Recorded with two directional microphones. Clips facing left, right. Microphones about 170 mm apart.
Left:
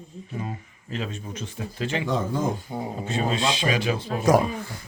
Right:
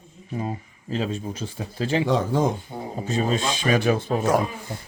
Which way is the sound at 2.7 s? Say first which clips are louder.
Left 3 dB; 10° left (ahead or behind).